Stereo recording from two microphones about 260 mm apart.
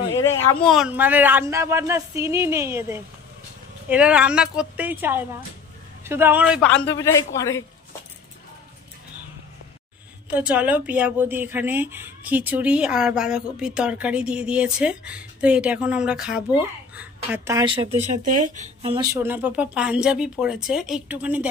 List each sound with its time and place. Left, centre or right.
0.2 s a sound: centre
0.7 s speech: centre
7.0 s speech: centre
10.3 s speech: centre
17.9 s speech: right
19.1 s speech: centre